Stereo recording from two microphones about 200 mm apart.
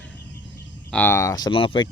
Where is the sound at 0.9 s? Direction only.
10° left (ahead or behind); by 1.8 s 25° left (ahead or behind).